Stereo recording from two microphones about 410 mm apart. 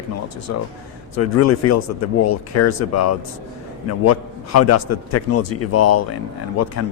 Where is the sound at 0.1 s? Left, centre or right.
Left.